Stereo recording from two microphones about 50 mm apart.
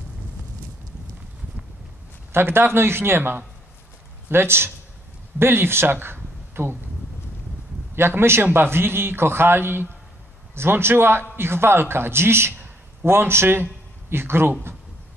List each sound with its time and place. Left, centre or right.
2.3 s a man's voice: right
7.9 s a man's voice: right